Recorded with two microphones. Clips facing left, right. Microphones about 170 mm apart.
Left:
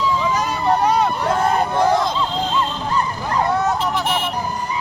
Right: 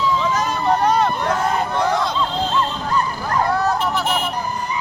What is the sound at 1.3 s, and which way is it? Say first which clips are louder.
Vehicle: left 2 dB; 30° left (ahead or behind).